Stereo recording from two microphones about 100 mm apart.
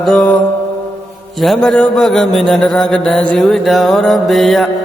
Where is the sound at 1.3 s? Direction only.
Centre (ahead or behind).